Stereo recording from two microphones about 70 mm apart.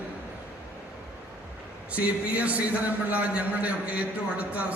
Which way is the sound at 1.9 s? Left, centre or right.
Right.